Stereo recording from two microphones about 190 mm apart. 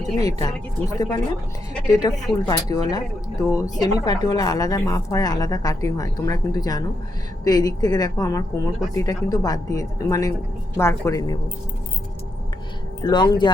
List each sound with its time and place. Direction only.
0.2 s a woman's voice: 20° left (ahead or behind)
13.1 s a woman's voice: 20° left (ahead or behind)